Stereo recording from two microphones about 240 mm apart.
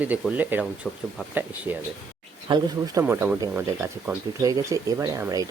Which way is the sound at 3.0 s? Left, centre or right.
Centre.